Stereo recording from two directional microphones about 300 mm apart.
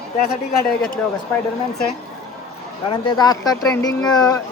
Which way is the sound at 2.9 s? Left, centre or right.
Centre.